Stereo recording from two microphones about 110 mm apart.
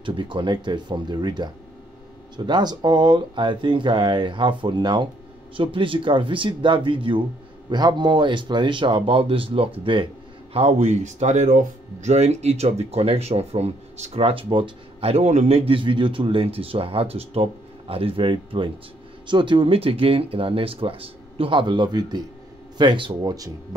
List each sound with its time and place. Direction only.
0.0 s speech: 50° right (ahead or behind)
10.5 s speech: 80° right; by 23.3 s 45° right (ahead or behind)